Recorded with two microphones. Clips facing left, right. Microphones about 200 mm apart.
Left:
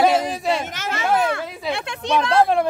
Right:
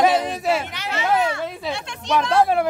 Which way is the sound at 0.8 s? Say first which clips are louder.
Left 1 dB; 45° left (ahead or behind).